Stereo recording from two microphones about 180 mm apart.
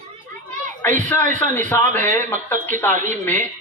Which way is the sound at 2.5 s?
10° left (ahead or behind).